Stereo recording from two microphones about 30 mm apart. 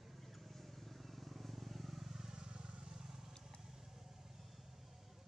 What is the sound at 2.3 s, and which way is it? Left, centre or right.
Vehicle, right.